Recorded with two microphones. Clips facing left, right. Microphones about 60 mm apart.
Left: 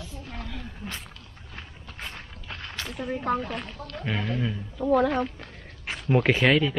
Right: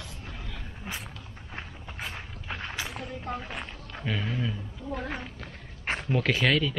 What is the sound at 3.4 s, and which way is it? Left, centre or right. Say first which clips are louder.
Speech: left 4 dB; centre.